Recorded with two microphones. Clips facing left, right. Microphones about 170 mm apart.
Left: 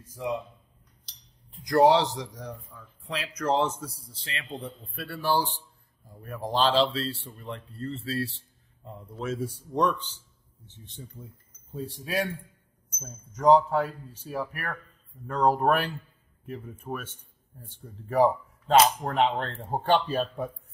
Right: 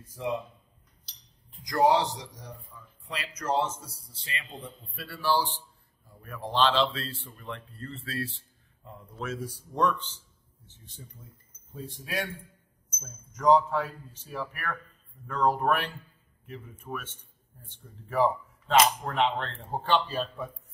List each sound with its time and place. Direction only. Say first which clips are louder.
1.6 s a man's voice: left 4 dB; 65° left (ahead or behind); by 3.6 s 90° left
4.9 s a man's voice: left 1 dB; 55° left (ahead or behind)
6.2 s speech: left 1 dB; 40° left (ahead or behind)
9.8 s speech: left 1 dB; 15° left (ahead or behind)
11.2 s a man's voice: left 7 dB; 30° left (ahead or behind); by 20.4 s 45° left (ahead or behind)